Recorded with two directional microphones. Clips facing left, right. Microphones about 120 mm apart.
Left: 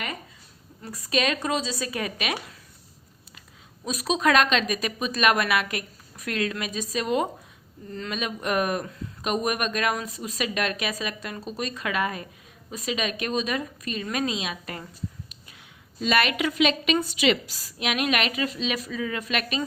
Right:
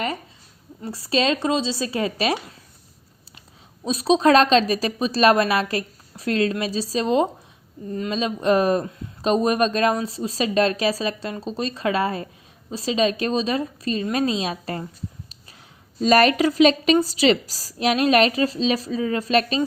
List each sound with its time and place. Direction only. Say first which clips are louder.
0.8 s speech: right 4 dB; 30° right (ahead or behind)
3.8 s speech: right 7 dB; 30° right (ahead or behind)
16.0 s speech: right 8 dB; 35° right (ahead or behind)